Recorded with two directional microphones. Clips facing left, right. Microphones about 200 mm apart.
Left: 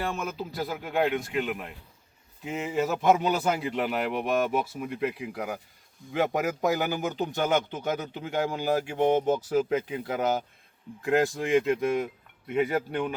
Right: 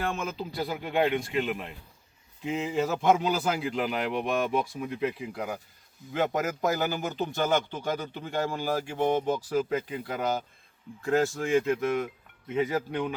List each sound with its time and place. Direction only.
0.1 s a man's voice: 5° left (ahead or behind); by 10.0 s 20° left (ahead or behind)
11.0 s speech: 15° left (ahead or behind)
12.5 s a man's voice: 5° left (ahead or behind)